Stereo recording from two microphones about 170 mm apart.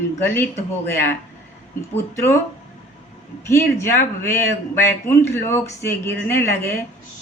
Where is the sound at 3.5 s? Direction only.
15° left (ahead or behind).